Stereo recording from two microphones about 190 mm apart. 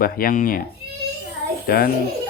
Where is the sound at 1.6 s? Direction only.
50° left (ahead or behind).